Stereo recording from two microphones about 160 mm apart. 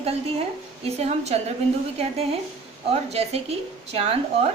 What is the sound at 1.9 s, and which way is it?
A woman's voice, 40° right (ahead or behind).